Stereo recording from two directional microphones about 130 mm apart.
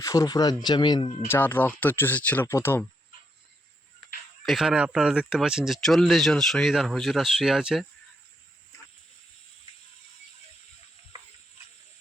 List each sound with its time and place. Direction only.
0.0 s speech: 25° left (ahead or behind)
1.3 s speech: 15° left (ahead or behind)
4.4 s speech: centre (ahead or behind)